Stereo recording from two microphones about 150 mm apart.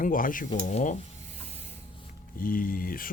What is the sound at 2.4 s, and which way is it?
Speech, 70° left (ahead or behind).